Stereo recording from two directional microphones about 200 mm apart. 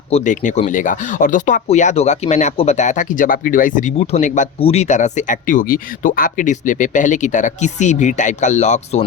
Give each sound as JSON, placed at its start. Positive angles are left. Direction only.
{"t": 0.1, "sound": "speech", "side_deg": 35}